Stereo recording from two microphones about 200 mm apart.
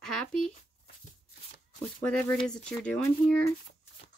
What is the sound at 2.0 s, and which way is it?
Speech, 5° left (ahead or behind).